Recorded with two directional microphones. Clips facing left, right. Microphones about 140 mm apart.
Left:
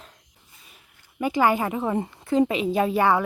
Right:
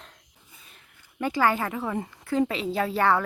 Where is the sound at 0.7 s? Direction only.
10° left (ahead or behind).